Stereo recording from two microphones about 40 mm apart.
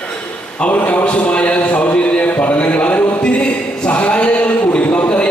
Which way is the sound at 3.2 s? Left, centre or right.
Left.